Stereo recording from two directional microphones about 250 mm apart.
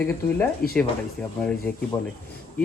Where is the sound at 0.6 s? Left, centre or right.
Left.